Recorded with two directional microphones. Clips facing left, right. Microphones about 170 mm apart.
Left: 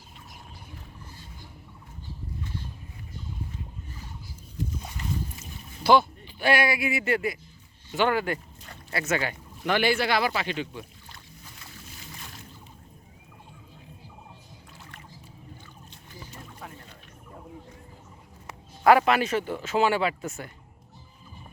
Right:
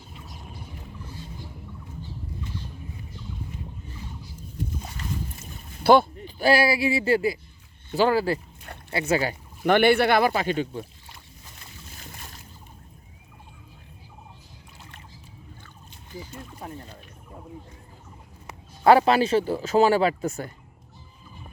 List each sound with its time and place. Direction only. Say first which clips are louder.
5.4 s a sound: right 1 dB; 55° right (ahead or behind)
6.4 s speech: right 4 dB; 30° right (ahead or behind)
9.6 s speech: right 6 dB; 55° right (ahead or behind)
16.6 s boat: right 6 dB; 35° right (ahead or behind)
18.8 s speech: right 2 dB; 30° right (ahead or behind)